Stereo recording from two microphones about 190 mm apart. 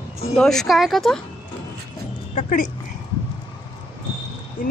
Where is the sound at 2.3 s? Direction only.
40° left (ahead or behind).